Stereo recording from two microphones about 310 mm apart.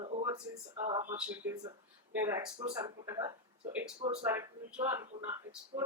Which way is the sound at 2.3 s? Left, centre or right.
Centre.